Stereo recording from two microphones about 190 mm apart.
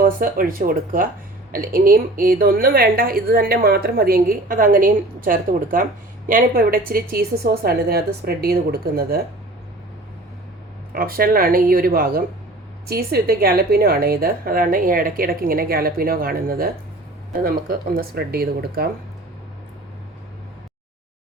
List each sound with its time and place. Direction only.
0.0 s a woman's voice: 50° right (ahead or behind)
10.9 s a woman's voice: 50° right (ahead or behind)